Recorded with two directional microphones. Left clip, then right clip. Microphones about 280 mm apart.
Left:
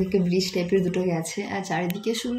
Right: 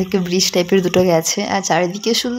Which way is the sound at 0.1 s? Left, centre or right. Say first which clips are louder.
Right 7 dB; right.